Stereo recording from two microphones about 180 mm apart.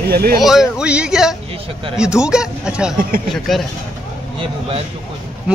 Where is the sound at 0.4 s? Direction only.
Centre (ahead or behind).